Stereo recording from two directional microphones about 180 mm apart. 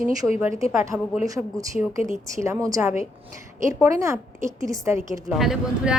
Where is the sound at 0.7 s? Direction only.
10° right (ahead or behind).